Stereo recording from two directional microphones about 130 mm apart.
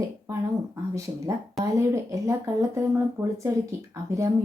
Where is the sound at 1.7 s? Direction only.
25° right (ahead or behind).